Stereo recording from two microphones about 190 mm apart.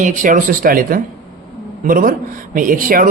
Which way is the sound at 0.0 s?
40° right (ahead or behind).